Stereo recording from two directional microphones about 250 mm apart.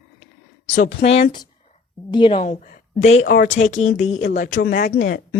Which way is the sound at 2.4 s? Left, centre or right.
Left.